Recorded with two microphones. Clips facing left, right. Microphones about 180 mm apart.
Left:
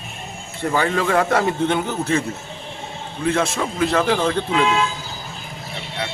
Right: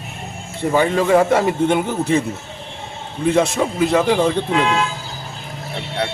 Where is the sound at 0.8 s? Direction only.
15° right (ahead or behind).